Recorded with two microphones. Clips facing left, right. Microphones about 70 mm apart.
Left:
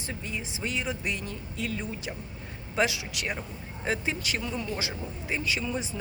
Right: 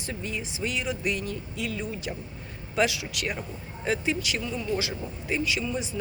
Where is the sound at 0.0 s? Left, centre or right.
Left.